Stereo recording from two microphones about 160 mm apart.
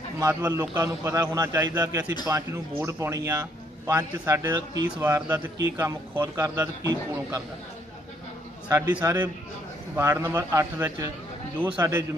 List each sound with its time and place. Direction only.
0.2 s a man's voice: 25° right (ahead or behind)
5.8 s a man's voice: 15° right (ahead or behind)
8.6 s a man's voice: 25° right (ahead or behind)